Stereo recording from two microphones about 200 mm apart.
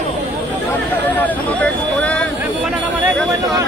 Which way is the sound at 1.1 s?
10° left (ahead or behind).